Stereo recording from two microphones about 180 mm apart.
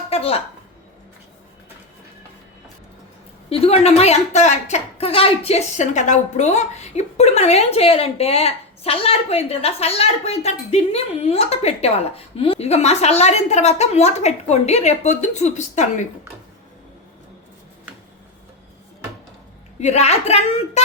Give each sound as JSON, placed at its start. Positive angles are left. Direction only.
{"t": 0.1, "sound": "a sound", "side_deg": 35}
{"t": 3.5, "sound": "a woman's voice", "side_deg": 35}
{"t": 19.8, "sound": "a woman's voice", "side_deg": 40}